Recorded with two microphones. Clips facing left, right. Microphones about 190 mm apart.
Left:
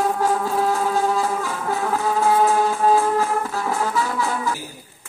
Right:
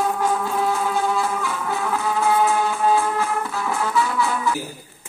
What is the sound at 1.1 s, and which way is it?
Music, 40° left (ahead or behind).